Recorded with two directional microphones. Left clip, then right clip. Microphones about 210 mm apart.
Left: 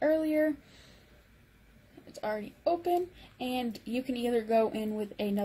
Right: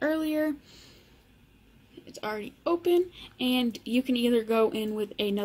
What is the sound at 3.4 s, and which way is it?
A woman's voice, 55° right (ahead or behind).